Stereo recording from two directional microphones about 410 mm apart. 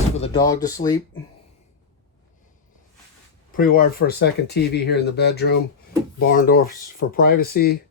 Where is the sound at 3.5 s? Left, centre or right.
Left.